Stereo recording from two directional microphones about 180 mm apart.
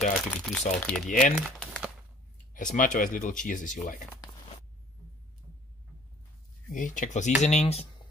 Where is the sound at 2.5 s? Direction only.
45° left (ahead or behind).